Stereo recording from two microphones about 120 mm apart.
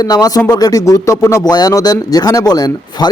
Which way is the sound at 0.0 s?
30° left (ahead or behind).